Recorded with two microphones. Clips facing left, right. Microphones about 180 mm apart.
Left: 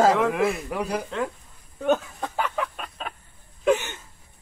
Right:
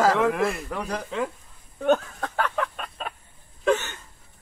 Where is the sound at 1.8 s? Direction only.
5° left (ahead or behind).